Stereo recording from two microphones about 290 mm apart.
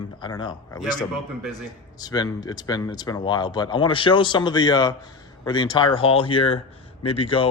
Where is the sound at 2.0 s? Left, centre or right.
Centre.